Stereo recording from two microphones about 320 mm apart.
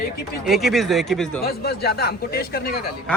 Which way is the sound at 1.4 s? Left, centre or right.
Left.